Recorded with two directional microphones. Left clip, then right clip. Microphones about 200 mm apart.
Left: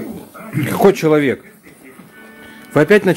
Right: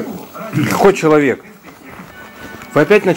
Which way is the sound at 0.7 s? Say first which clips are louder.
Right 2 dB; 20° left (ahead or behind).